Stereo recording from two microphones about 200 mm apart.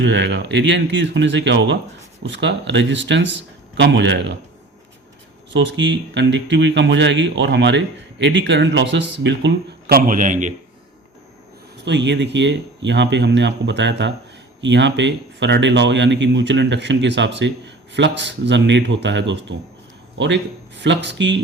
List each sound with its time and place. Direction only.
0.0 s speech: 60° right (ahead or behind)
5.5 s speech: 65° right (ahead or behind); by 10.5 s 40° right (ahead or behind)
11.9 s speech: 60° right (ahead or behind)